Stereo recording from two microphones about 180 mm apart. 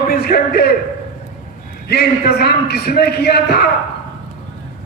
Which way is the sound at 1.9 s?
60° left (ahead or behind).